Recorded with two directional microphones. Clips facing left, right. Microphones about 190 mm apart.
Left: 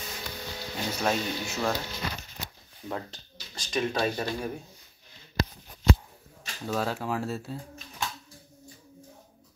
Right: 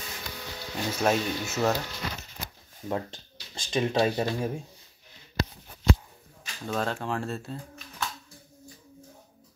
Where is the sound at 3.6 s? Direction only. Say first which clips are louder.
Right 3 dB; 25° right (ahead or behind).